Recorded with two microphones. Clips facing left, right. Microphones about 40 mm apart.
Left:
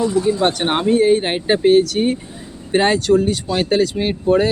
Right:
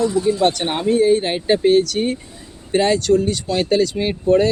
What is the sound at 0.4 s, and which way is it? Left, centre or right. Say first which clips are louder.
Speech: left 1 dB; left.